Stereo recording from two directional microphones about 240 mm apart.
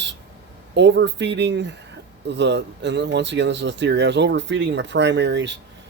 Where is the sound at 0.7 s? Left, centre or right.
Right.